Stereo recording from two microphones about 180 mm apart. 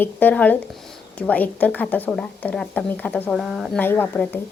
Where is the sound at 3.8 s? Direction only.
10° left (ahead or behind).